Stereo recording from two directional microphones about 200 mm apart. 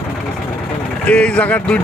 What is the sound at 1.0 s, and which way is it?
Speech, 5° left (ahead or behind).